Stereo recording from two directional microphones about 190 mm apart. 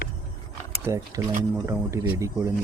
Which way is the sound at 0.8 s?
15° right (ahead or behind).